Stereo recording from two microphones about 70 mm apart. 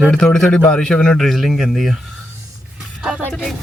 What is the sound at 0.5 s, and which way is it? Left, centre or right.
Speech, left.